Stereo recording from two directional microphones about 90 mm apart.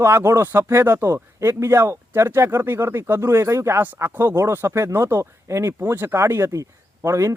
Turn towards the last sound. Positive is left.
turn(degrees=-35)  # may be behind; listen again after turning